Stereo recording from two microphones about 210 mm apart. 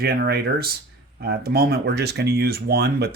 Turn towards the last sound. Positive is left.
turn(degrees=-50)  # may be behind; listen again after turning